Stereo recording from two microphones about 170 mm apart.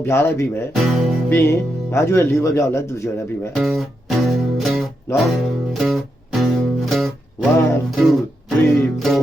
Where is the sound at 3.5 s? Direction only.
Centre (ahead or behind).